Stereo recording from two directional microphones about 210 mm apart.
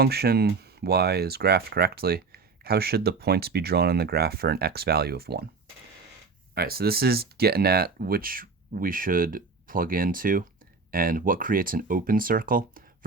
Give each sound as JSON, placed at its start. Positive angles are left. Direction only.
{"t": 0.0, "sound": "speech", "side_deg": -50}
{"t": 6.5, "sound": "speech", "side_deg": -45}